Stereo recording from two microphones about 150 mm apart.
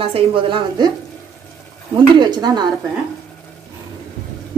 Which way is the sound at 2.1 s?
30° right (ahead or behind).